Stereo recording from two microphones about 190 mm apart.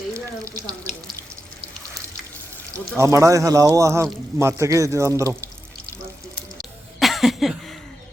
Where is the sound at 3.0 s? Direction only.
15° right (ahead or behind).